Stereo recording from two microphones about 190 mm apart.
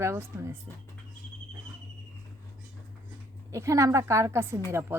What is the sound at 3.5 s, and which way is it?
Speech, 15° right (ahead or behind).